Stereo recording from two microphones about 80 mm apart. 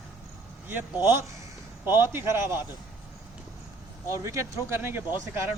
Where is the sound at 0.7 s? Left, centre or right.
Right.